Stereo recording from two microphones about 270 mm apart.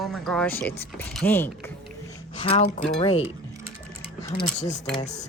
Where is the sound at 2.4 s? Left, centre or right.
Left.